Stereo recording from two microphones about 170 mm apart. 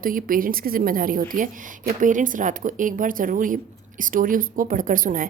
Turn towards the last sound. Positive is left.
turn(degrees=-55)  # may be behind; listen again after turning